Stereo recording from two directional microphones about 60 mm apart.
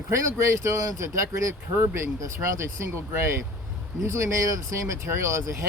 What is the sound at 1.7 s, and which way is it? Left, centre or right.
Speech, right.